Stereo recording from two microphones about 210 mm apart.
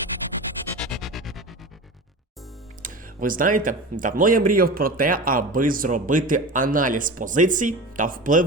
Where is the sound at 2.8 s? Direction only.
40° right (ahead or behind).